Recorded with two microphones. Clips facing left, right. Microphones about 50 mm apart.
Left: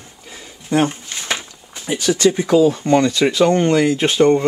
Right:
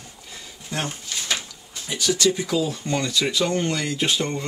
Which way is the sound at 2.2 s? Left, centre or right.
Left.